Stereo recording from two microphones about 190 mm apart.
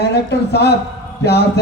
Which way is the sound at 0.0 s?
60° left (ahead or behind).